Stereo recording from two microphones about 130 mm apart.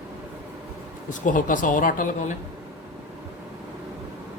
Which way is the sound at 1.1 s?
80° left.